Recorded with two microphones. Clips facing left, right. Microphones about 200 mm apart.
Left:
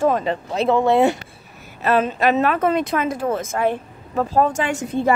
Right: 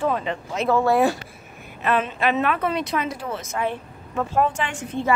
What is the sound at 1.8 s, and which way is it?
Speech, 40° left (ahead or behind).